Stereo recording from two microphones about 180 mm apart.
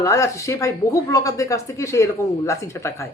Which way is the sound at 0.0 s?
15° left (ahead or behind).